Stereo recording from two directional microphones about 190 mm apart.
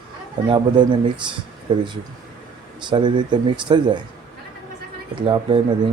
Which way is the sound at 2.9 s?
25° right (ahead or behind).